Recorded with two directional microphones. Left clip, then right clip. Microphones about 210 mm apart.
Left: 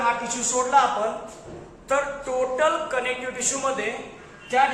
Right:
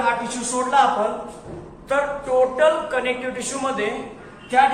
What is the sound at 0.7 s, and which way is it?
Speech, 20° left (ahead or behind).